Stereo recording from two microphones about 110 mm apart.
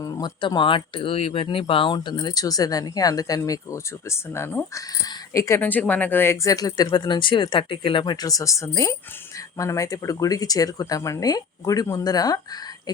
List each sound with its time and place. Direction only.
0.0 s speech: 40° left (ahead or behind)
5.5 s speech: 15° left (ahead or behind); by 12.4 s 35° left (ahead or behind)